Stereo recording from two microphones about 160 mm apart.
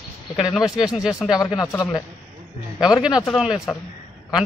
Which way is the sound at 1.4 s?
20° left (ahead or behind).